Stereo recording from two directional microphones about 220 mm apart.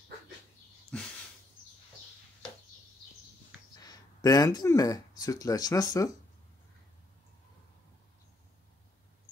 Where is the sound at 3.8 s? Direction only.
15° left (ahead or behind).